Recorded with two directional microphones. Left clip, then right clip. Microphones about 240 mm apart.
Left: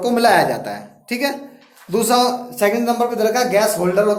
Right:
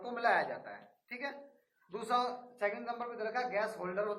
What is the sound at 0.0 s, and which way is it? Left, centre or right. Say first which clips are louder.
Speech: left 18 dB; left.